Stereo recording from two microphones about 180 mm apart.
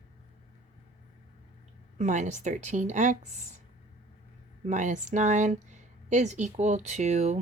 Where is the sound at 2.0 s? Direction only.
40° right (ahead or behind).